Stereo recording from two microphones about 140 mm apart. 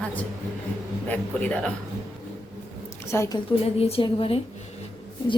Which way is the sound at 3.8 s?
45° left (ahead or behind).